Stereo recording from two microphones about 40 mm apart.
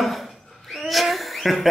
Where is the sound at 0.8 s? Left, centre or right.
Centre.